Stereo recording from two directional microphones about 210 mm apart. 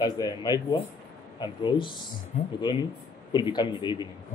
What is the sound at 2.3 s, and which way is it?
Speech, 35° left (ahead or behind).